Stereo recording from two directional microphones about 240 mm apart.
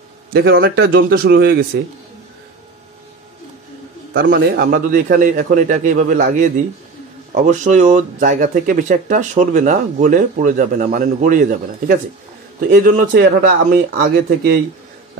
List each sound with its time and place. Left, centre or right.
0.3 s speech: right
4.1 s speech: right
12.5 s speech: right